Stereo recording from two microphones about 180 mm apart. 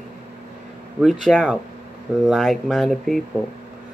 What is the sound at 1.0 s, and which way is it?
Speech, centre (ahead or behind).